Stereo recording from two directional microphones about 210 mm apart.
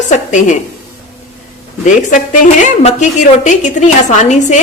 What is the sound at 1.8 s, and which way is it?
A woman's voice, 35° left (ahead or behind).